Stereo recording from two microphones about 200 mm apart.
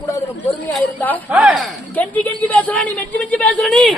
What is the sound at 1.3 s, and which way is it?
Speech, 5° right (ahead or behind).